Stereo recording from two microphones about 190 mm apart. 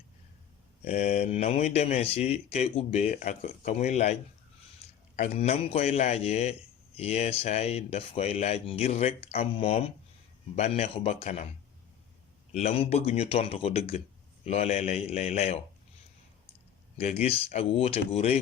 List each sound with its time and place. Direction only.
0.9 s a man's voice: 35° left (ahead or behind)
12.5 s a man's voice: 35° left (ahead or behind)
17.0 s a man's voice: 35° left (ahead or behind)